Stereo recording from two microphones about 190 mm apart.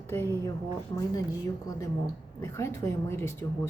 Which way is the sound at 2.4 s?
15° left (ahead or behind).